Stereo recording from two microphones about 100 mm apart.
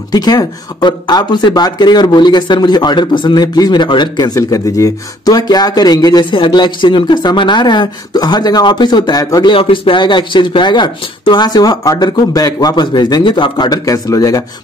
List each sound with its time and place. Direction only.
0.1 s speech: 40° left (ahead or behind)
4.4 s speech: 35° left (ahead or behind)
6.3 s speech: 50° left (ahead or behind)
9.5 s speech: 60° left (ahead or behind); by 14.4 s 35° left (ahead or behind)